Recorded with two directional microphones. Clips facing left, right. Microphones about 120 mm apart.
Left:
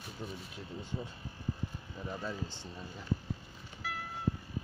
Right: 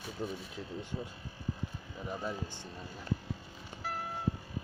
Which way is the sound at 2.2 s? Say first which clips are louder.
Right 1 dB; 15° right (ahead or behind).